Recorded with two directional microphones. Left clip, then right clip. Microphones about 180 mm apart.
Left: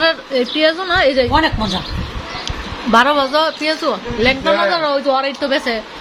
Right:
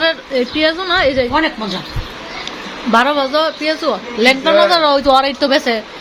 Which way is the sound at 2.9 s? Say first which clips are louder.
Left 1 dB; centre (ahead or behind).